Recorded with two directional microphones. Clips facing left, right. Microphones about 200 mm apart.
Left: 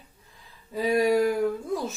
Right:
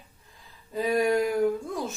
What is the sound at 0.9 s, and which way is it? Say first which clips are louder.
Speech: left 2 dB; centre (ahead or behind).